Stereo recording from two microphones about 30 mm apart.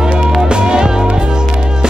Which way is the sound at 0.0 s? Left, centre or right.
Right.